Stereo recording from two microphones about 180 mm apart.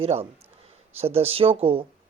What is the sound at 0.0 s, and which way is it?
Speech, 35° right (ahead or behind).